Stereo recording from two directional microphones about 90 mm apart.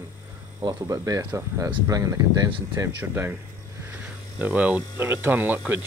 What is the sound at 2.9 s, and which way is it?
Speech, 25° right (ahead or behind).